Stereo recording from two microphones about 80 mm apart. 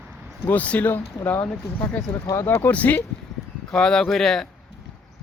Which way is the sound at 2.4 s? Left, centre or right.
Left.